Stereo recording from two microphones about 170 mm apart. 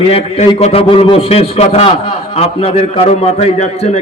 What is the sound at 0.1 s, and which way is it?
A man's voice, 35° left (ahead or behind).